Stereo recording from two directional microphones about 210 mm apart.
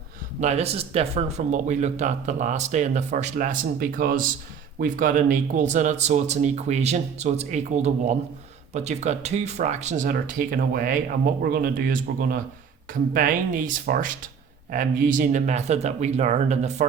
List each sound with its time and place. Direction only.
0.3 s speech: 30° right (ahead or behind)